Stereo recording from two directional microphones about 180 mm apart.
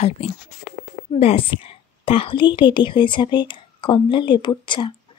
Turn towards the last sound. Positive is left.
turn(degrees=25)  # may be behind; listen again after turning